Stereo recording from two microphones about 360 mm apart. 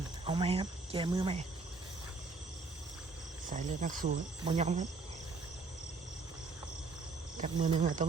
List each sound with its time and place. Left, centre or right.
0.3 s speech: centre
3.5 s speech: right
7.3 s speech: centre